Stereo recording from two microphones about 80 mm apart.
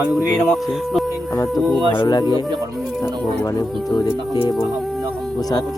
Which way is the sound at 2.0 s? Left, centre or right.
Left.